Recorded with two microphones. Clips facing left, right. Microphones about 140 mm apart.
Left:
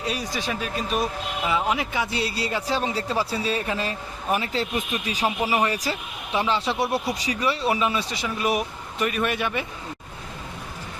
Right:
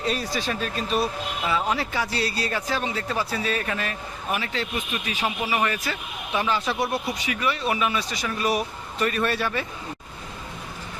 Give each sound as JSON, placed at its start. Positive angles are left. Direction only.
{"t": 0.0, "sound": "a man's voice", "side_deg": 10}
{"t": 5.5, "sound": "a man's voice", "side_deg": 20}